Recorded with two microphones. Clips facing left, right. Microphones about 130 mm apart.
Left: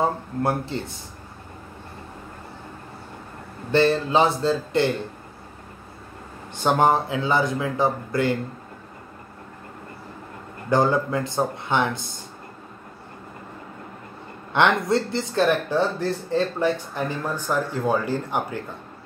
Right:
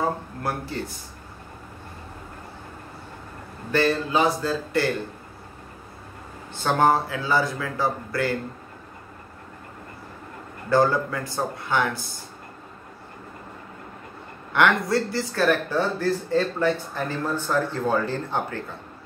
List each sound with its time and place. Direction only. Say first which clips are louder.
0.0 s speech: left 3 dB; 25° left (ahead or behind)
3.7 s speech: left 3 dB; 25° left (ahead or behind)
6.5 s speech: left 1 dB; 20° left (ahead or behind)
10.7 s speech: even; 20° left (ahead or behind)
14.5 s speech: left 1 dB; 25° left (ahead or behind)